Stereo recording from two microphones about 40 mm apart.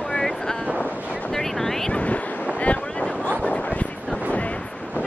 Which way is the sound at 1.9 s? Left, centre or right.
Left.